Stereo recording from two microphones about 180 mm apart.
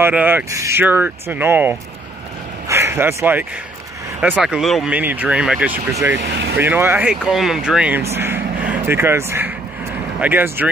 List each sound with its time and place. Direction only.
0.0 s speech: 10° right (ahead or behind)
6.2 s speech: 65° right (ahead or behind)
6.6 s speech: 10° right (ahead or behind)